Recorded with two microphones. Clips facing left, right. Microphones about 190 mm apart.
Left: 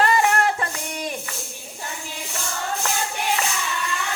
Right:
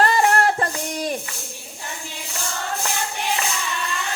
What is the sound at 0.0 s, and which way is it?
Music, 40° right (ahead or behind).